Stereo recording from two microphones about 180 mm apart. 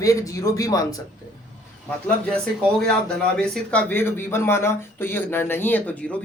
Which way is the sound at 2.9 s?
5° left (ahead or behind).